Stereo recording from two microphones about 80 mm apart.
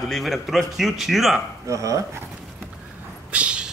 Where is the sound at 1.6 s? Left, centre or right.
Right.